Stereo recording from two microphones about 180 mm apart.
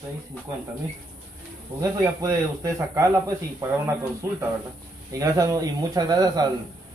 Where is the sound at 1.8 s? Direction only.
20° right (ahead or behind).